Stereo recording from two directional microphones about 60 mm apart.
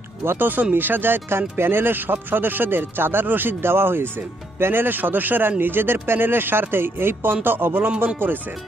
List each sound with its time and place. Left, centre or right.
0.2 s speech: right